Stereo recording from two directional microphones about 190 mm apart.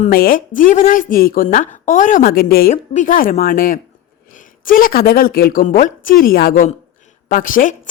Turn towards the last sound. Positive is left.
turn(degrees=45)  # may be behind; listen again after turning